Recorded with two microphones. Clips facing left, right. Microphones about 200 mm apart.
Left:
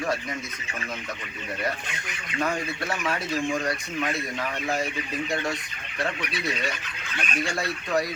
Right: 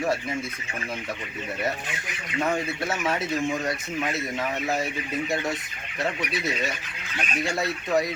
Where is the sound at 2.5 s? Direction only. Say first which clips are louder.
Right 2 dB; 25° right (ahead or behind).